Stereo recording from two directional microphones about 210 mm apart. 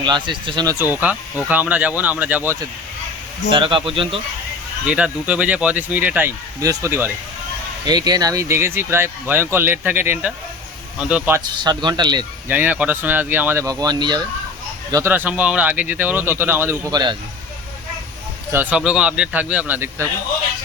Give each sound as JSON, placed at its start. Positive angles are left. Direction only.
{"t": 0.0, "sound": "speech", "side_deg": -20}
{"t": 3.5, "sound": "speech", "side_deg": -25}
{"t": 4.9, "sound": "speech", "side_deg": -5}
{"t": 12.5, "sound": "speech", "side_deg": -10}
{"t": 18.5, "sound": "speech", "side_deg": -5}